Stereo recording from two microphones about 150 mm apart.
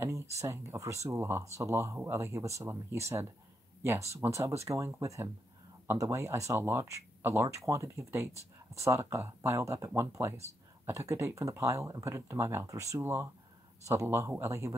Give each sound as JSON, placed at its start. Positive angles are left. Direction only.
{"t": 0.0, "sound": "speech", "side_deg": -20}